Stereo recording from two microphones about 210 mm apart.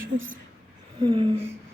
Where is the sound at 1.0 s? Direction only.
20° right (ahead or behind).